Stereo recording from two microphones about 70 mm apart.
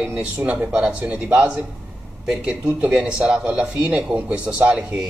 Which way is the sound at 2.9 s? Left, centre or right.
Centre.